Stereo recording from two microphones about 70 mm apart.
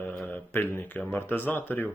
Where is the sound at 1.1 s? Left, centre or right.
Left.